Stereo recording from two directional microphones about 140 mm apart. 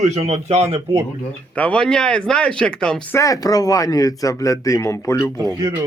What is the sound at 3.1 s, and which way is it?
Speech, 25° left (ahead or behind).